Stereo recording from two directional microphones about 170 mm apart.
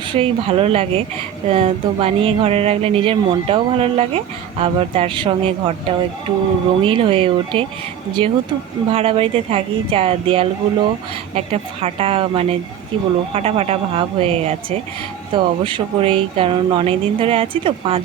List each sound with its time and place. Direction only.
0.1 s speech: 30° right (ahead or behind)
6.8 s speech: 30° right (ahead or behind)